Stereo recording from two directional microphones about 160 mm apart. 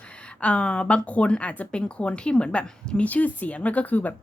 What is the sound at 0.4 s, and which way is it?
Speech, 5° left (ahead or behind).